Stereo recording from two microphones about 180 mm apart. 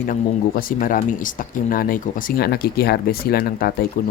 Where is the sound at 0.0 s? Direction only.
50° left (ahead or behind).